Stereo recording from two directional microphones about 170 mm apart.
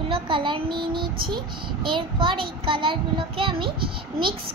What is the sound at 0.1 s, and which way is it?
A child's voice, 30° right (ahead or behind).